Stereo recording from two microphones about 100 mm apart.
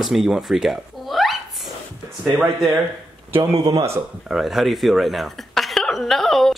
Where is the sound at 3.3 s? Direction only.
65° right (ahead or behind).